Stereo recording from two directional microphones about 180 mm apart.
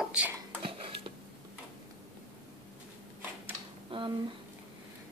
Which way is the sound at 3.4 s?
30° right (ahead or behind).